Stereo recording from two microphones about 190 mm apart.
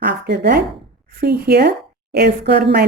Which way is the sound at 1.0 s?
55° right (ahead or behind).